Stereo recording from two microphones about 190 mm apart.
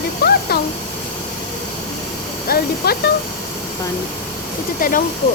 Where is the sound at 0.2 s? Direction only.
55° left (ahead or behind).